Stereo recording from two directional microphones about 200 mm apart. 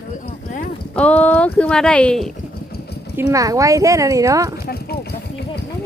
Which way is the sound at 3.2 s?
15° right (ahead or behind).